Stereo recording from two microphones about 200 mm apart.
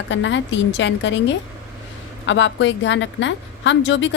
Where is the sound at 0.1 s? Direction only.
65° left (ahead or behind).